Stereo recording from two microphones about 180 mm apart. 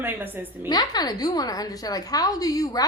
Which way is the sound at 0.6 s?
25° left (ahead or behind).